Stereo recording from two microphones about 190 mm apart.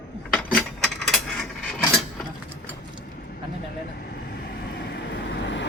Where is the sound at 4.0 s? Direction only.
60° left (ahead or behind).